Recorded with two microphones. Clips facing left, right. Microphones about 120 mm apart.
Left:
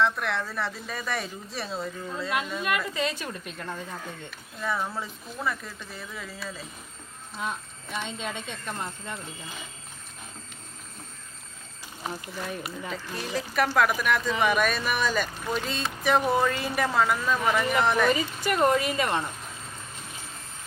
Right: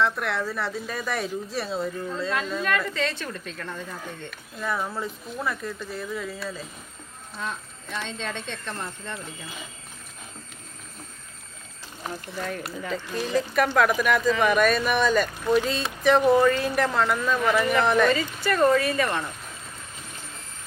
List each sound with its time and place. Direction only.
0.0 s speech: centre (ahead or behind)
4.2 s speech: centre (ahead or behind)
12.0 s speech: 5° left (ahead or behind)
18.1 s speech: 15° left (ahead or behind)